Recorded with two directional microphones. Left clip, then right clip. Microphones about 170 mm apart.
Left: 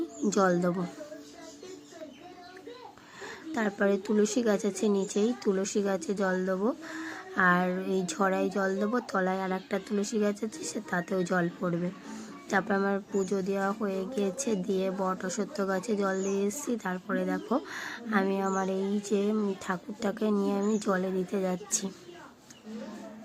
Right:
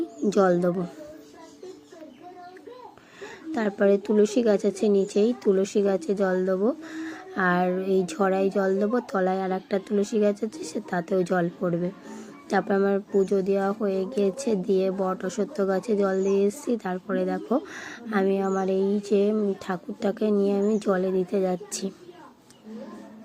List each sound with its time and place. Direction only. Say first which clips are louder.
0.3 s speech: right 5 dB; 15° right (ahead or behind)
3.5 s speech: right 6 dB; 20° right (ahead or behind)